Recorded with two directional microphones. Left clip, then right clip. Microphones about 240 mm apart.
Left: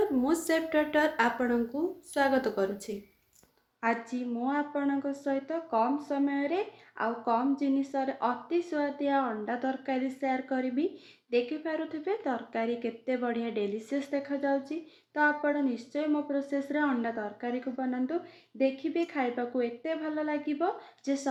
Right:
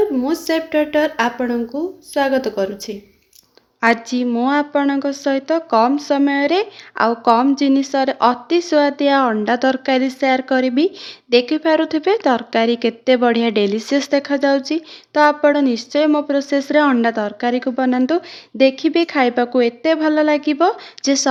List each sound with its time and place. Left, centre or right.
0.4 s speech: centre
3.8 s a woman's voice: right